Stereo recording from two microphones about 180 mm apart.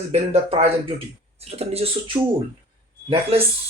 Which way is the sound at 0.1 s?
35° right (ahead or behind).